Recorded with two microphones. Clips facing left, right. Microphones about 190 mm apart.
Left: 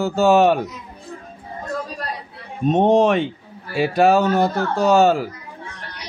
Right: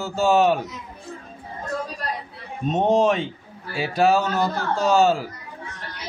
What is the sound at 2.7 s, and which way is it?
Speech, 60° left (ahead or behind).